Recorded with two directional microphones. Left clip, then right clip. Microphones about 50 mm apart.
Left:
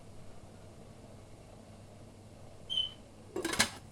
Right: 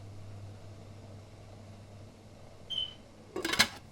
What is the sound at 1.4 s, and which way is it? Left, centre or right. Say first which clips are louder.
Vehicle: right 1 dB; right.